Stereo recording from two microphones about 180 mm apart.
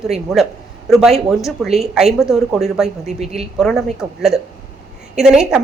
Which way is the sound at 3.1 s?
35° right (ahead or behind).